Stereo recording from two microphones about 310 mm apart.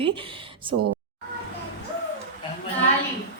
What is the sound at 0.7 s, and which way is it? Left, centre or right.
Speech, right.